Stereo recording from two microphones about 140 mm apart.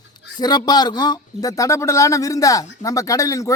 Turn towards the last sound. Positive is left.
turn(degrees=25)  # may be behind; listen again after turning